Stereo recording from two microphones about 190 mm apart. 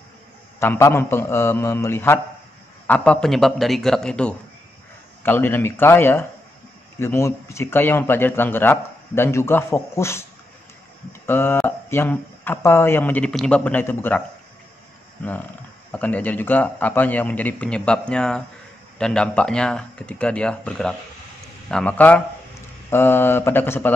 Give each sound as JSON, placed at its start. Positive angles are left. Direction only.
{"t": 0.6, "sound": "speech", "side_deg": 15}
{"t": 11.2, "sound": "speech", "side_deg": 10}